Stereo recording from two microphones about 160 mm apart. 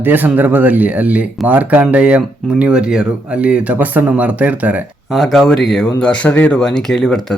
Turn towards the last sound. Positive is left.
turn(degrees=5)  # may be behind; listen again after turning